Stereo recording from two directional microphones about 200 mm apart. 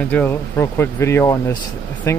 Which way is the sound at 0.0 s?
10° left (ahead or behind).